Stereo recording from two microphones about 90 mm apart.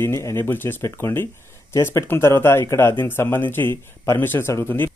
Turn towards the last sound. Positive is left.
turn(degrees=25)  # may be behind; listen again after turning